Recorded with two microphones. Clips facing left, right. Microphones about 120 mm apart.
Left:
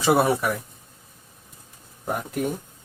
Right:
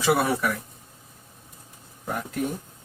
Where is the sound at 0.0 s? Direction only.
20° left (ahead or behind).